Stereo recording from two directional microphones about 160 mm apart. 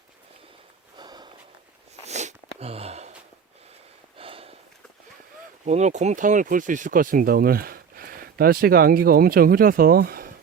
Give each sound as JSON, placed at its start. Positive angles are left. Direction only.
{"t": 0.9, "sound": "walk", "side_deg": -25}
{"t": 2.0, "sound": "sniff", "side_deg": -45}
{"t": 4.2, "sound": "sniff", "side_deg": -35}
{"t": 5.6, "sound": "speech", "side_deg": -45}